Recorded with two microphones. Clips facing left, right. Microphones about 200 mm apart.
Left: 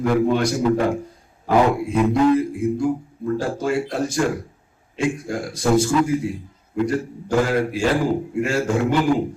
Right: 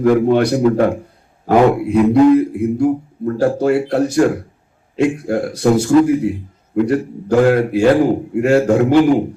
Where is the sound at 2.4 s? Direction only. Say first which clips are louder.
Right 5 dB; 65° right (ahead or behind).